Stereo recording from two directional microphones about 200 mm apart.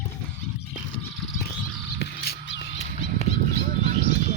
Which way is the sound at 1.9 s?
55° left (ahead or behind).